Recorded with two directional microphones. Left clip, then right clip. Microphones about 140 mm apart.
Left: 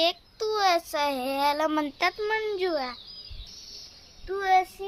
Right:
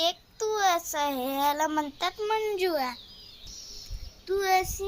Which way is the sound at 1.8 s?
60° left (ahead or behind).